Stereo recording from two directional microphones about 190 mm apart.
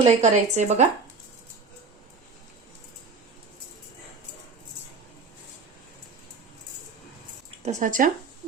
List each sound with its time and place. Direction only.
0.0 s speech: 35° right (ahead or behind)
7.6 s speech: 40° right (ahead or behind)